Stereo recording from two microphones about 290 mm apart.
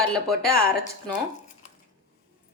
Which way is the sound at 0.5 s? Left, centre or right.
Left.